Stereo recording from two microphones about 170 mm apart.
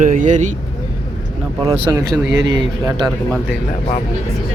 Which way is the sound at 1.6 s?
20° right (ahead or behind).